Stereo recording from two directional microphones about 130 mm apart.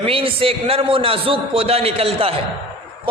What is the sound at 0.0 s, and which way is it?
A man's voice, 45° right (ahead or behind).